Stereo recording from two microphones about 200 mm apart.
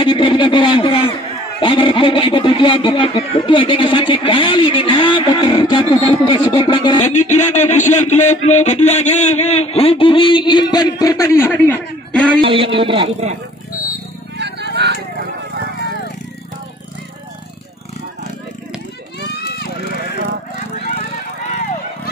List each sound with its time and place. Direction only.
0.0 s speech: 25° left (ahead or behind)
1.6 s a sound: 25° left (ahead or behind)
7.0 s speech: 35° left (ahead or behind); by 12.3 s 5° left (ahead or behind)
12.4 s speech: 25° right (ahead or behind)
14.3 s vehicle: 60° right (ahead or behind)
19.1 s run: 55° left (ahead or behind)